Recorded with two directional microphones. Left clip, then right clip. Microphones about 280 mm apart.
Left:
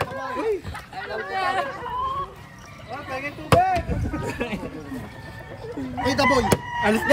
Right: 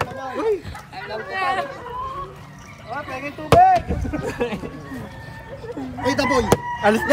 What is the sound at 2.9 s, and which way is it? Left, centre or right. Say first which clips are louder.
Chop: right 2 dB; centre.